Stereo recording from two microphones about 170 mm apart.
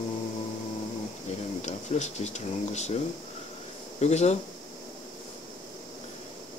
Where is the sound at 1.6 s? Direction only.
40° left (ahead or behind).